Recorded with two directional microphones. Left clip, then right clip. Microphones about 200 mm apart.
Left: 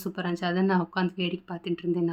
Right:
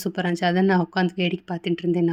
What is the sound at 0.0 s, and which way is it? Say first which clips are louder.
Speech: right 7 dB; 35° right (ahead or behind).